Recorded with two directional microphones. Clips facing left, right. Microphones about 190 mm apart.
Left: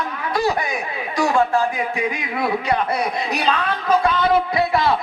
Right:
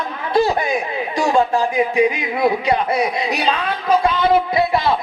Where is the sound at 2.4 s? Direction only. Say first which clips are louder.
Right 4 dB; 20° right (ahead or behind).